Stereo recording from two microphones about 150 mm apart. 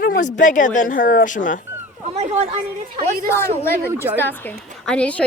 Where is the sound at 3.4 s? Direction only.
15° left (ahead or behind).